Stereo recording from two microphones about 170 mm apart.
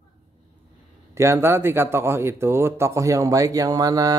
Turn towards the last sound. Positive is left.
turn(degrees=-20)  # may be behind; listen again after turning